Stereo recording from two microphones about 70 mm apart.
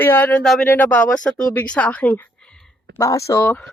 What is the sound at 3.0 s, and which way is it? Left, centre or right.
Speech, left.